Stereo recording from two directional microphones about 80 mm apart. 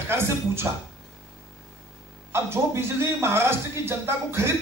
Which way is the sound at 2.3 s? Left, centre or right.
Right.